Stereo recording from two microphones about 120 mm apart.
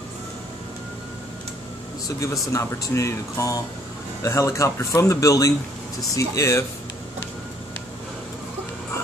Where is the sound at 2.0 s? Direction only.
25° left (ahead or behind).